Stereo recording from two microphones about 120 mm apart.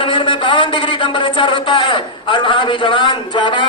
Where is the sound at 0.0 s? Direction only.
45° left (ahead or behind).